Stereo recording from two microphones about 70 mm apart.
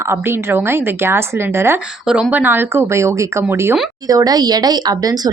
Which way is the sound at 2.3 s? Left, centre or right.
Right.